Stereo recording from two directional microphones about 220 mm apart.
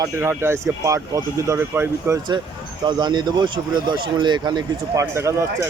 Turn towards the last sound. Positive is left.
turn(degrees=-15)  # may be behind; listen again after turning